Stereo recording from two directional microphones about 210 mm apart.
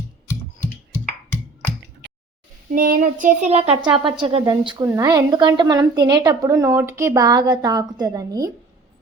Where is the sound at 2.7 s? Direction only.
40° right (ahead or behind); by 8.5 s 15° right (ahead or behind).